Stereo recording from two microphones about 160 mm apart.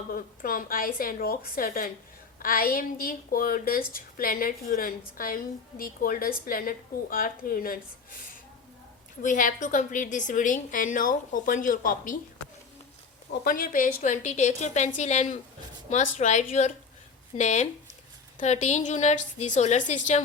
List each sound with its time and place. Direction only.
0.1 s a woman's voice: 60° left (ahead or behind)
9.2 s a woman's voice: 50° left (ahead or behind)
13.3 s a woman's voice: 65° left (ahead or behind); by 20.2 s 50° left (ahead or behind)